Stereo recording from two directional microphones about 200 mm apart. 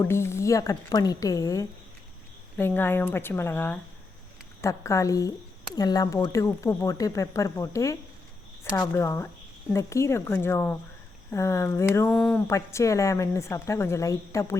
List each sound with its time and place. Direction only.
0.0 s speech: 10° left (ahead or behind)